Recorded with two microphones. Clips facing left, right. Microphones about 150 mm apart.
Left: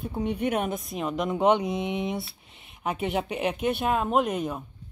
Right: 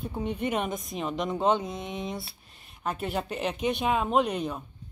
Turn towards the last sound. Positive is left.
turn(degrees=5)  # may be behind; listen again after turning